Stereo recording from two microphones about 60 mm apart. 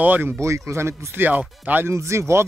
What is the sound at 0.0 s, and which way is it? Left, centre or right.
Speech, right.